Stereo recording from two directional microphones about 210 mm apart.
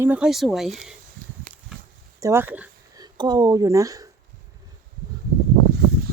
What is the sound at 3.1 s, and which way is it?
Speech, 20° right (ahead or behind).